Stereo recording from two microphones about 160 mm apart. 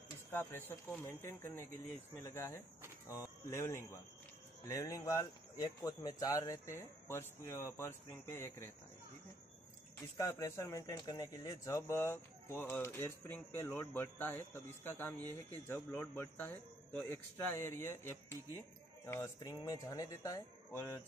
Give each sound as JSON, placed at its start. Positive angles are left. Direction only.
{"t": 0.3, "sound": "speech", "side_deg": 15}
{"t": 10.1, "sound": "speech", "side_deg": 20}